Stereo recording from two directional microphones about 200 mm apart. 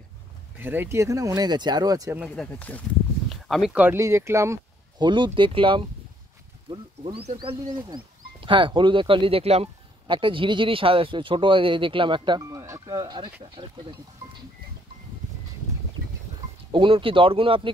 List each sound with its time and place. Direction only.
0.6 s speech: 10° right (ahead or behind)
2.2 s speech: 5° left (ahead or behind); by 14.4 s 25° right (ahead or behind)
16.7 s speech: 25° right (ahead or behind)